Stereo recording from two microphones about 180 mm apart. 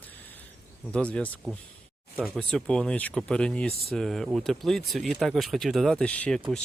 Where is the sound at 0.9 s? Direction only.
5° left (ahead or behind).